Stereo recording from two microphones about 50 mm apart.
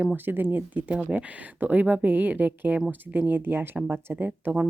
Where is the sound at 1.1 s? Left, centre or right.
Right.